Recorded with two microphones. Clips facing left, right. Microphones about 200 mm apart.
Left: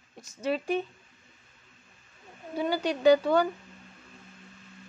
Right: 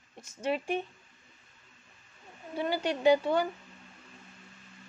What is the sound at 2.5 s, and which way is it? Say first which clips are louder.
Speech: left 2 dB; 40° left (ahead or behind).